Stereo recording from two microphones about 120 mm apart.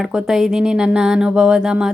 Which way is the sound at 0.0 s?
5° right (ahead or behind).